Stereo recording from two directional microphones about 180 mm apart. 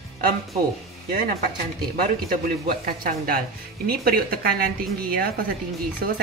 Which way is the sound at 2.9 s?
55° right (ahead or behind).